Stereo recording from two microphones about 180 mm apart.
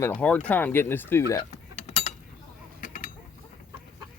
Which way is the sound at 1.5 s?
40° left (ahead or behind).